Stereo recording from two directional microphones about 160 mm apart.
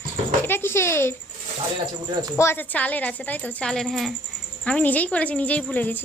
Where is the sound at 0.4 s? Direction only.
15° left (ahead or behind).